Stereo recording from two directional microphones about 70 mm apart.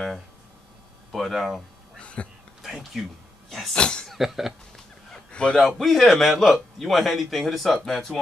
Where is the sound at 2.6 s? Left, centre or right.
Centre.